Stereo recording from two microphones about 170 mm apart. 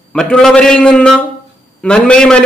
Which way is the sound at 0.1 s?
5° left (ahead or behind).